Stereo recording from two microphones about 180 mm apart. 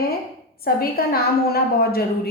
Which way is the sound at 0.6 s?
55° left (ahead or behind).